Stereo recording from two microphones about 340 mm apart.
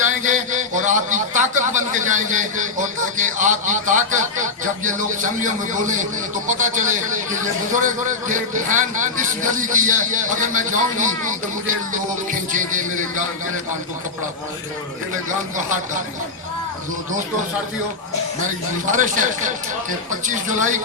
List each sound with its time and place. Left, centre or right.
0.2 s a sound: right
4.6 s a man's voice: right
6.5 s a man's voice: right
18.9 s a man's voice: right
20.2 s a man's voice: right